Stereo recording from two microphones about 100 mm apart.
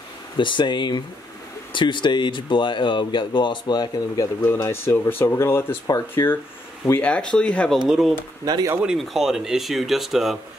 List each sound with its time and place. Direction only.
0.4 s speech: 55° left (ahead or behind)
4.4 s speech: 30° left (ahead or behind)
7.0 s speech: 10° left (ahead or behind)
7.8 s speech: 5° right (ahead or behind)
8.5 s speech: 40° right (ahead or behind)
8.8 s speech: centre (ahead or behind)